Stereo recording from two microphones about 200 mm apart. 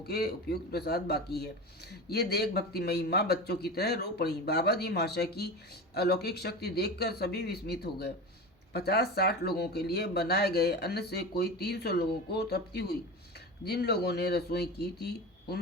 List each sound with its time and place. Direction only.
0.0 s speech: 50° left (ahead or behind)